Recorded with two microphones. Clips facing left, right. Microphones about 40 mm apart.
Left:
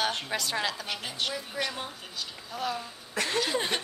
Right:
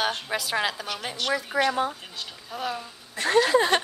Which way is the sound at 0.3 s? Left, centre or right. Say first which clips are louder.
Right 4 dB; centre.